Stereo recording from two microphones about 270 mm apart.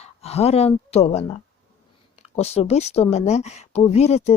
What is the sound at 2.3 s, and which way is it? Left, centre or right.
Speech, left.